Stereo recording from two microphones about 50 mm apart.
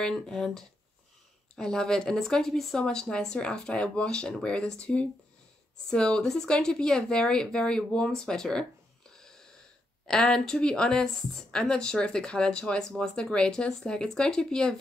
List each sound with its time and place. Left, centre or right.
0.3 s speech: centre
2.8 s speech: centre
9.1 s wheeze: centre
10.0 s speech: centre